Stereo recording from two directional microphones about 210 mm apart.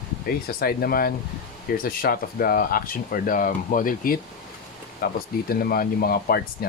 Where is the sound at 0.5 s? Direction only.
45° left (ahead or behind).